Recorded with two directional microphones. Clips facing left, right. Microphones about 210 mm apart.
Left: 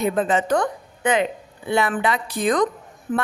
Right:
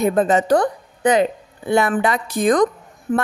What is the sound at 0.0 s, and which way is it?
A woman's voice, 45° right (ahead or behind).